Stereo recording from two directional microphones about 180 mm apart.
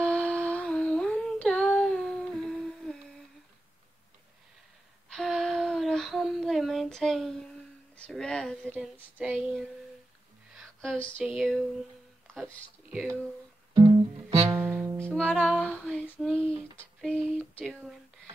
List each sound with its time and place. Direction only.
0.0 s humming: 5° left (ahead or behind)
5.1 s a sound: 5° left (ahead or behind)
8.9 s child singing: 10° right (ahead or behind)
10.5 s a sound: centre (ahead or behind)
11.3 s speech: centre (ahead or behind)
13.7 s guitar: 20° right (ahead or behind)
14.5 s music: 10° right (ahead or behind)
15.6 s female singing: 5° left (ahead or behind)
17.0 s a sound: 5° left (ahead or behind)